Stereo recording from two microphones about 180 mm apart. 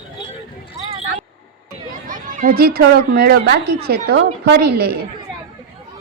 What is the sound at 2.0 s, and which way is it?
A woman's voice, 50° right (ahead or behind).